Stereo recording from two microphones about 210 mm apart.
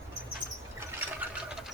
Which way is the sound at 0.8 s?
10° right (ahead or behind).